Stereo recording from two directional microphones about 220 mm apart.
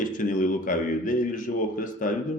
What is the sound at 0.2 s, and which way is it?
A man's voice, 35° left (ahead or behind).